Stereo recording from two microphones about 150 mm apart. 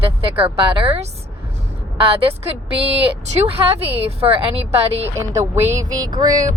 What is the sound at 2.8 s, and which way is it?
Speech, 40° right (ahead or behind).